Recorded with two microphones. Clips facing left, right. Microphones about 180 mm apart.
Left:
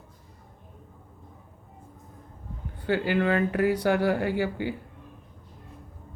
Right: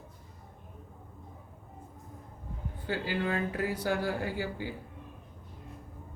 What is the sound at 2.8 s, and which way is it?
Speech, 65° left (ahead or behind).